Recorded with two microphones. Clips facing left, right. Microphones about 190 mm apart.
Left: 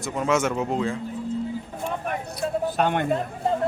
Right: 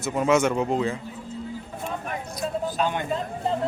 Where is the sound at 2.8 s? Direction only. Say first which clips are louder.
Left 4 dB; 60° left (ahead or behind).